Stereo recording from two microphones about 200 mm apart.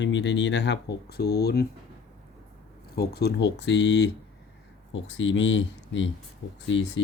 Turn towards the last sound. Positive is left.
turn(degrees=65)  # may be behind; listen again after turning